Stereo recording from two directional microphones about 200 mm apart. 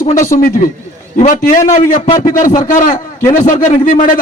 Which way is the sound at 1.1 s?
40° left (ahead or behind).